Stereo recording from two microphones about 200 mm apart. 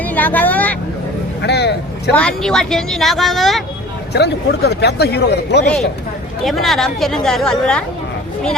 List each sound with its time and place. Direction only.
0.0 s speech: 10° left (ahead or behind)
1.4 s vehicle: 55° left (ahead or behind)
2.1 s speech: 5° left (ahead or behind)
4.1 s speech: 55° left (ahead or behind)
6.4 s speech: centre (ahead or behind)